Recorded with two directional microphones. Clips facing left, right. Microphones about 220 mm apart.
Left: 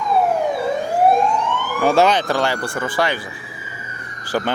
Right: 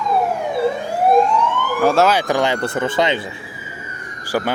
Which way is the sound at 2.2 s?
15° right (ahead or behind).